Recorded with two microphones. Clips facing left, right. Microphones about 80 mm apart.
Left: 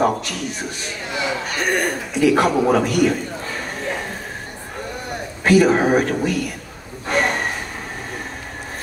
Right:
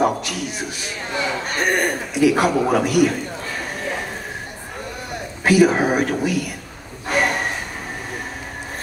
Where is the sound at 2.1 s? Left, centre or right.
Centre.